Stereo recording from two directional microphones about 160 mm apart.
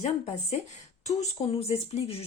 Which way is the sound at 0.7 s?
45° left (ahead or behind).